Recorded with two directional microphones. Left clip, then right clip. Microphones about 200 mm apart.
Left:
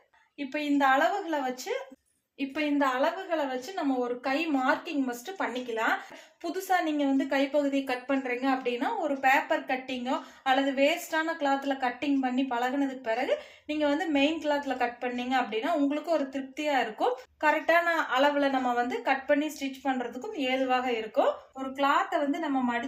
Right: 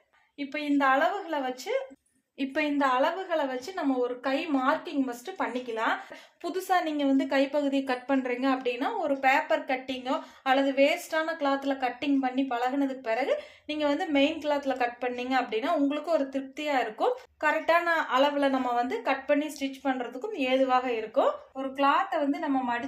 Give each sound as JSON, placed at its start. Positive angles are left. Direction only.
{"t": 0.8, "sound": "a woman's voice", "side_deg": -30}
{"t": 2.4, "sound": "a woman's voice", "side_deg": -50}
{"t": 4.2, "sound": "a woman's voice", "side_deg": -40}